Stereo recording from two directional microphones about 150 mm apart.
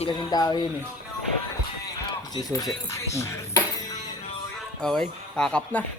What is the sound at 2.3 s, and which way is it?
Speech, 25° left (ahead or behind).